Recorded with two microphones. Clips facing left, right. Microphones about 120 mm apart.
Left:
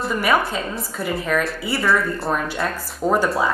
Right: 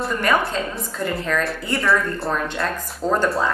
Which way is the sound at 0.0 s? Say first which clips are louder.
Left 1 dB; 5° left (ahead or behind).